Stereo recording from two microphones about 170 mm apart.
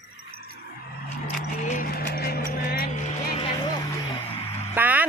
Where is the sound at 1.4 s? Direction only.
45° left (ahead or behind).